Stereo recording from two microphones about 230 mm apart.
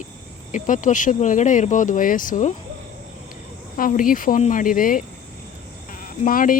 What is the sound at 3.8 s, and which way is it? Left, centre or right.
Speech, left.